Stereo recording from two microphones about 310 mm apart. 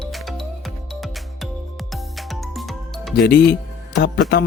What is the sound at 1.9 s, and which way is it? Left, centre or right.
Music, centre.